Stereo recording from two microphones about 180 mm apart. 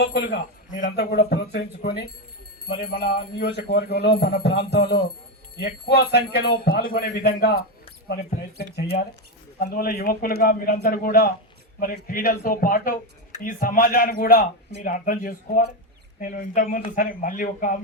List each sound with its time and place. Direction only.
0.7 s a man's voice: 45° left (ahead or behind)
0.9 s speech: 65° left (ahead or behind)
8.0 s speech: 50° left (ahead or behind)
8.7 s a man's voice: 60° left (ahead or behind)